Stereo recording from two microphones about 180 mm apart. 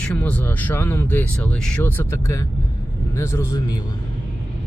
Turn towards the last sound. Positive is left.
turn(degrees=15)  # may be behind; listen again after turning